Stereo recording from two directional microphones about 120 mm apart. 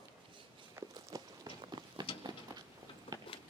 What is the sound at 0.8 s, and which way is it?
Walk, 20° right (ahead or behind).